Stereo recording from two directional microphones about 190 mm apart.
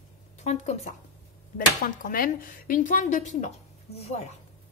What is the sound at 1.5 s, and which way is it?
Speech, 45° left (ahead or behind).